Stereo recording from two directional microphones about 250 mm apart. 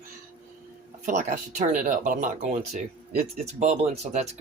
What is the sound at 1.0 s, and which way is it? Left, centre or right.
Speech, right.